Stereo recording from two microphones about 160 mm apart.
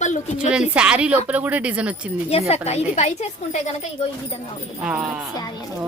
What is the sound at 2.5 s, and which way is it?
A woman's voice, 40° left (ahead or behind).